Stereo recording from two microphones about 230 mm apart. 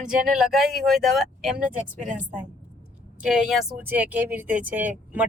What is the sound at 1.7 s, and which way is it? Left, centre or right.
Speech, right.